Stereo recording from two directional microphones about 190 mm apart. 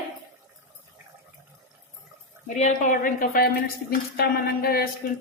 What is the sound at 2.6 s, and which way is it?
A woman's voice, 40° left (ahead or behind).